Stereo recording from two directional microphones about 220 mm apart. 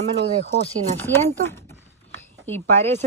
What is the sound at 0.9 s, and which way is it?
Speech, 10° left (ahead or behind).